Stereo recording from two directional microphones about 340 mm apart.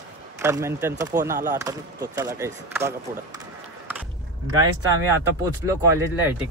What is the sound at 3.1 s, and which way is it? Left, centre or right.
Speech, right.